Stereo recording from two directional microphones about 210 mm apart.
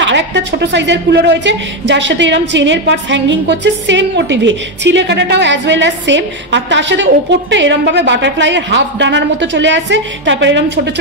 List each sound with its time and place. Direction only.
0.0 s a woman's voice: 55° right (ahead or behind)